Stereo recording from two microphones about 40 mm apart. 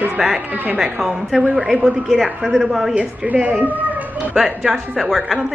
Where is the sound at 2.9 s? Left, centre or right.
Right.